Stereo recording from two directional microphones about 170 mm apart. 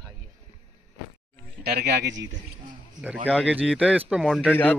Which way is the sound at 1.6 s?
65° right (ahead or behind).